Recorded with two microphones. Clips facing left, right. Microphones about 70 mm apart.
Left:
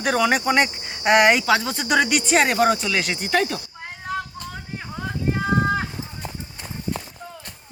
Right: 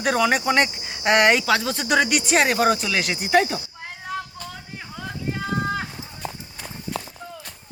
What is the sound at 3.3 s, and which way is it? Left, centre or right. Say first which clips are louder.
Speech: right 4 dB; centre.